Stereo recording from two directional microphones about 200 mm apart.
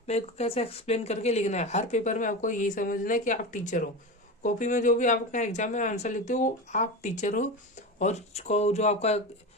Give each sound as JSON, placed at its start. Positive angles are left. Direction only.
{"t": 0.1, "sound": "speech", "side_deg": 30}